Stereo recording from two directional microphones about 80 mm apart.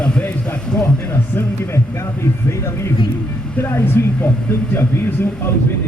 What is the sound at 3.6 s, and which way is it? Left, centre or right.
Speech, left.